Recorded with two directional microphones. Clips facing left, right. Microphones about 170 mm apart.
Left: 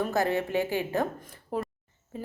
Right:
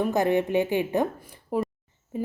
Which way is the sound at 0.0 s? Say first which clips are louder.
Right 4 dB; 20° right (ahead or behind).